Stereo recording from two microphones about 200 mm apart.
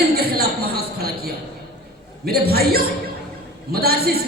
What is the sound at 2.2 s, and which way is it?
A woman's voice, 50° right (ahead or behind).